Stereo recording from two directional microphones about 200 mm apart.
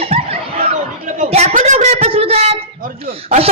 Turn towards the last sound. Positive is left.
turn(degrees=-30)  # may be behind; listen again after turning